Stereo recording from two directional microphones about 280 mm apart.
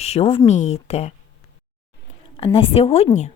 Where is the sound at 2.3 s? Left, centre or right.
Centre.